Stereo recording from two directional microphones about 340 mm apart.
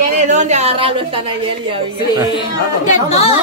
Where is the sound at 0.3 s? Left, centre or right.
Right.